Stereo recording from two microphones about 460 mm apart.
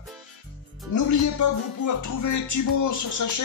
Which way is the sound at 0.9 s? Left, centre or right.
Left.